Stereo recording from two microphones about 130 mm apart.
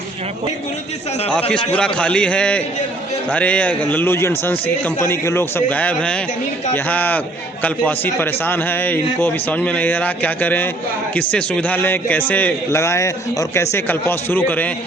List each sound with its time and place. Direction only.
1.3 s a man's voice: 10° left (ahead or behind)